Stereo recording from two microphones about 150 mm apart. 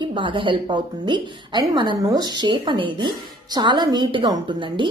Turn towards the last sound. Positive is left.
turn(degrees=-35)  # may be behind; listen again after turning